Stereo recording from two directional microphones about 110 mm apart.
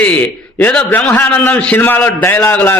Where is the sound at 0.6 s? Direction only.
10° left (ahead or behind).